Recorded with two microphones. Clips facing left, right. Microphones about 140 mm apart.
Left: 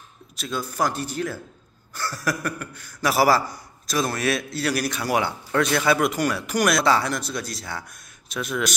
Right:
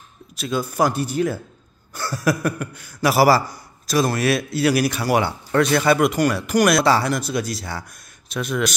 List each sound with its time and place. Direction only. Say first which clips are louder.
0.4 s a man's voice: right 5 dB; 10° right (ahead or behind)